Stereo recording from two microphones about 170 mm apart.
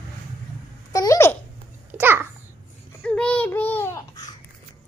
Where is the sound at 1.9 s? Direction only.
10° right (ahead or behind).